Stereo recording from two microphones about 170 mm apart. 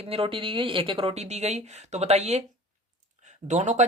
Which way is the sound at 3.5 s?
45° right (ahead or behind).